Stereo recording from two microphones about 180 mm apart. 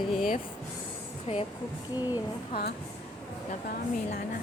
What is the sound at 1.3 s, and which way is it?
Speech, 35° left (ahead or behind).